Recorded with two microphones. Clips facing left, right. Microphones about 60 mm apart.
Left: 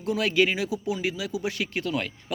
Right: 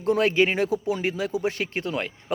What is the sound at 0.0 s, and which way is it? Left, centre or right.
Speech, right.